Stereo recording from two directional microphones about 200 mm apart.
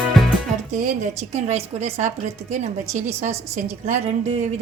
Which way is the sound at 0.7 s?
40° right (ahead or behind).